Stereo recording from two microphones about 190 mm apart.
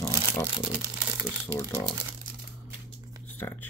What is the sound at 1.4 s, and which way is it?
Speech, 15° left (ahead or behind).